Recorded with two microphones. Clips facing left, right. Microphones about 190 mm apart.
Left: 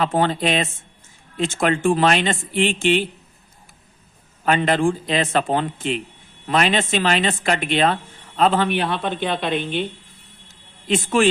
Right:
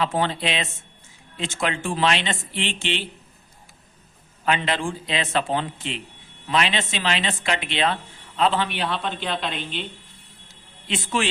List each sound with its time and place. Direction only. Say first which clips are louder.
0.0 s speech: left 4 dB; 50° left (ahead or behind)
4.4 s speech: left 6 dB; 45° left (ahead or behind)
10.8 s speech: left 7 dB; 50° left (ahead or behind)